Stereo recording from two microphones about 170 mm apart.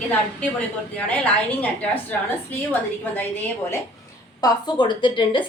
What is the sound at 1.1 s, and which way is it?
Speech, 10° left (ahead or behind).